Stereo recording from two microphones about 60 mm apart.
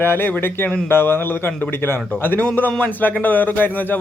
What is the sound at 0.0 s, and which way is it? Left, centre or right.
Speech, left.